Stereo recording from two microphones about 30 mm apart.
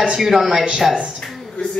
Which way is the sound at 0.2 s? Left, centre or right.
Centre.